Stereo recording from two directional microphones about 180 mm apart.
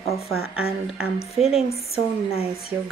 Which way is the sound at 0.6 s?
5° right (ahead or behind).